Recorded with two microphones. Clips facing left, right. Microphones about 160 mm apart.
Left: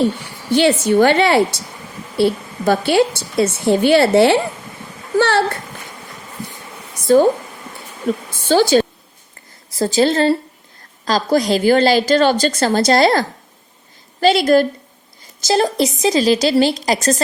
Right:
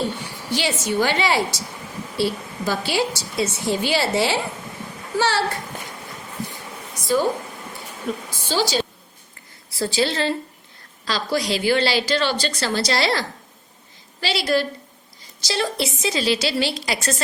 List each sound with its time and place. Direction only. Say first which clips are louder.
0.5 s a woman's voice: left 10 dB; 55° left (ahead or behind)
7.0 s a woman's voice: left 9 dB; 55° left (ahead or behind)
8.4 s a woman's voice: left 10 dB; 55° left (ahead or behind)
9.6 s a woman's voice: left 7 dB; 40° left (ahead or behind)